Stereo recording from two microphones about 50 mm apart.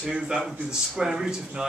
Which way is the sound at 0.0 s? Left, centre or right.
Centre.